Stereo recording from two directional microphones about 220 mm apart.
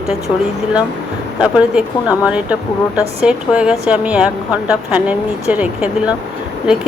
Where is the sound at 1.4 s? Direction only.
5° right (ahead or behind).